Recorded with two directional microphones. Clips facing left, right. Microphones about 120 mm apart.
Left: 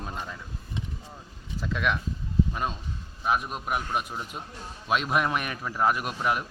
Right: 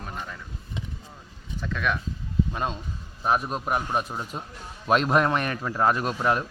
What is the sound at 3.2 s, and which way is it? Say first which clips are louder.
A man's voice: right 3 dB; 40° right (ahead or behind).